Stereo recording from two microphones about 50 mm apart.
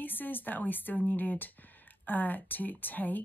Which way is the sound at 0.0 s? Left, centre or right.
Left.